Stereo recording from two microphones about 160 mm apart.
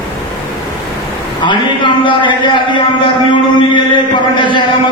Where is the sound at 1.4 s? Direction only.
30° left (ahead or behind).